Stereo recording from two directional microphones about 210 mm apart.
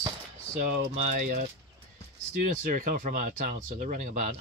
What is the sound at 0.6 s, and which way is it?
Speech, 40° right (ahead or behind).